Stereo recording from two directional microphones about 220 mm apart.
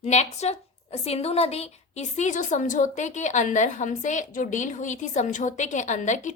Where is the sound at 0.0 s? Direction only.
30° left (ahead or behind).